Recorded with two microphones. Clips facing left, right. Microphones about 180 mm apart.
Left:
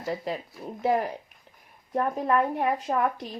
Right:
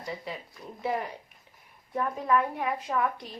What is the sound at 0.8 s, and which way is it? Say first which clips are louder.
A woman's voice: left 6 dB; 45° left (ahead or behind).